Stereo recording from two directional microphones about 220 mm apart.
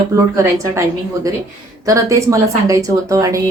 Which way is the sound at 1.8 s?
15° right (ahead or behind).